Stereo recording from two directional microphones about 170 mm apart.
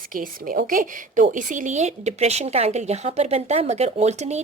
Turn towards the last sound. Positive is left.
turn(degrees=-40)  # may be behind; listen again after turning